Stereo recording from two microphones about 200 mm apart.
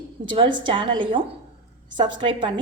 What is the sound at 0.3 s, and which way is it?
A woman's voice, 25° right (ahead or behind).